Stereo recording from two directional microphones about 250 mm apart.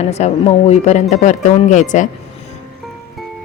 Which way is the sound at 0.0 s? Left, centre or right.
Left.